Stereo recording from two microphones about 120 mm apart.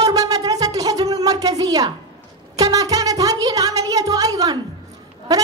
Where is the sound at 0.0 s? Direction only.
30° right (ahead or behind).